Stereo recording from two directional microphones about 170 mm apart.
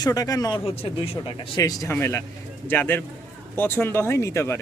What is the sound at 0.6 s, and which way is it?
Speech, 30° left (ahead or behind).